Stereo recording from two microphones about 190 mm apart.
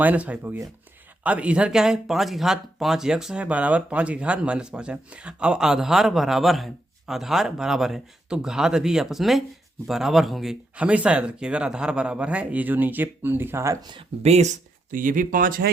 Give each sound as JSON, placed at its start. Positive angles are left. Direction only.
{"t": 0.0, "sound": "speech", "side_deg": -10}
{"t": 13.9, "sound": "speech", "side_deg": -35}